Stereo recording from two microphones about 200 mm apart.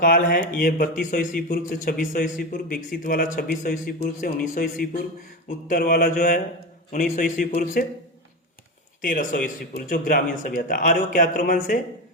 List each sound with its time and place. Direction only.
0.0 s speech: 45° left (ahead or behind)
9.0 s speech: 45° left (ahead or behind)